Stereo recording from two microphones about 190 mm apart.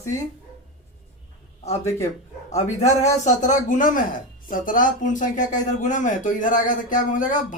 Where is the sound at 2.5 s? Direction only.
35° left (ahead or behind).